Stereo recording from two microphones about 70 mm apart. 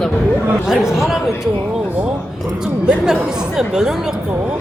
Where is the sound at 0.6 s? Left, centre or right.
Centre.